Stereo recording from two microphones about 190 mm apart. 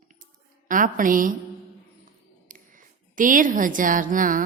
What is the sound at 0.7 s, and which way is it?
Speech, 45° right (ahead or behind).